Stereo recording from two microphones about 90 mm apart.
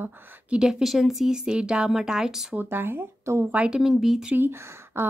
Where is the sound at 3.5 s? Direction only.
15° right (ahead or behind).